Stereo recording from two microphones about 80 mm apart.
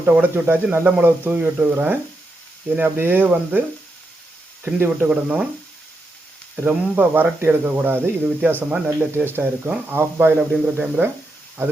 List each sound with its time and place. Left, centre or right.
0.0 s speech: right
4.6 s speech: right
6.7 s speech: right